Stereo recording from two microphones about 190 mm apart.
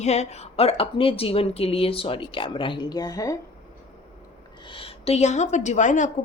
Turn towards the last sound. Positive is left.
turn(degrees=40)  # may be behind; listen again after turning